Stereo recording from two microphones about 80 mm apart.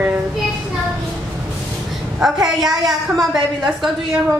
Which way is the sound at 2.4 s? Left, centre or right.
Centre.